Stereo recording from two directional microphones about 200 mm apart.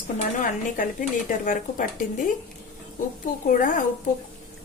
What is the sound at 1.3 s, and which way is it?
Speech, 40° left (ahead or behind).